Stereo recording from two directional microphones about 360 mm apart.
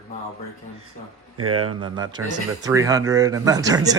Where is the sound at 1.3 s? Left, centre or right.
Right.